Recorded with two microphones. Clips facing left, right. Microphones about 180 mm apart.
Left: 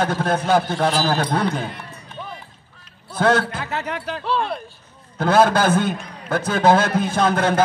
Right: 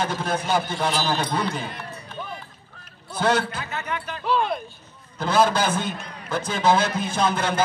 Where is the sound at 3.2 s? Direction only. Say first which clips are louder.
Left 4 dB; 55° left (ahead or behind); by 4.2 s 80° left.